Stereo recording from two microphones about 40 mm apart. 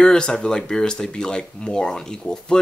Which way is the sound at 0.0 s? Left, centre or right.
Left.